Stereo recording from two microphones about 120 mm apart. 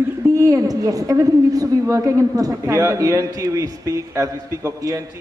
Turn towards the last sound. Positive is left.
turn(degrees=-30)  # may be behind; listen again after turning